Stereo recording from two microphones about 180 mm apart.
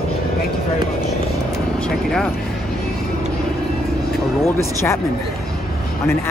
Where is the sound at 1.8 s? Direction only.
Centre (ahead or behind).